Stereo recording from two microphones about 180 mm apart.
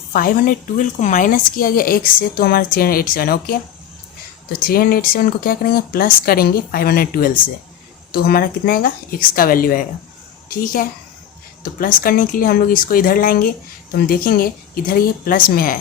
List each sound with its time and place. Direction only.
0.1 s a woman's voice: 50° left (ahead or behind)